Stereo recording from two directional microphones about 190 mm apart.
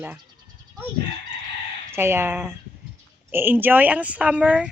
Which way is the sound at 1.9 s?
15° right (ahead or behind).